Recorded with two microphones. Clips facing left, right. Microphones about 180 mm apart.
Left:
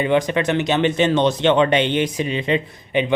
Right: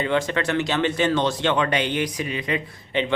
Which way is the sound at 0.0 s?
15° left (ahead or behind).